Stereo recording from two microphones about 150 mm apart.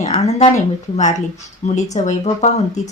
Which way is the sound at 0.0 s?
50° left (ahead or behind).